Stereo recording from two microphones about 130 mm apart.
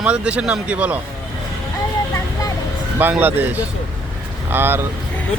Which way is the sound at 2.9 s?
15° right (ahead or behind).